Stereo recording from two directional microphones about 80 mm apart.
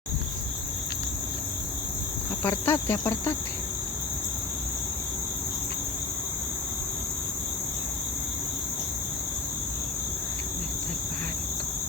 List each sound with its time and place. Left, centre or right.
2.4 s cricket: left